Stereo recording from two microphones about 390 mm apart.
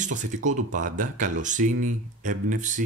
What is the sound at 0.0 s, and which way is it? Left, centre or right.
Speech, centre.